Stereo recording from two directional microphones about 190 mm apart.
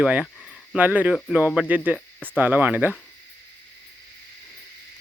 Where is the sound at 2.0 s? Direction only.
10° left (ahead or behind).